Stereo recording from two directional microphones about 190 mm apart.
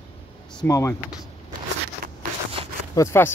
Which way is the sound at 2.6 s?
30° right (ahead or behind).